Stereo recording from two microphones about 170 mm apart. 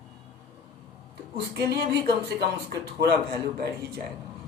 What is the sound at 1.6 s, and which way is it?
Speech, 70° right (ahead or behind).